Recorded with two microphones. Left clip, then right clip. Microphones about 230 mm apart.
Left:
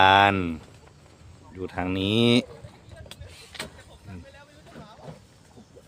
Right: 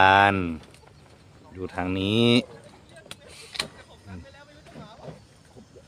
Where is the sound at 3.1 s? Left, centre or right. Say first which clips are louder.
Right 4 dB; right.